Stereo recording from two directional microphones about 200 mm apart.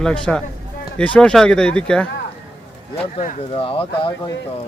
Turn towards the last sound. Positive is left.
turn(degrees=25)  # may be behind; listen again after turning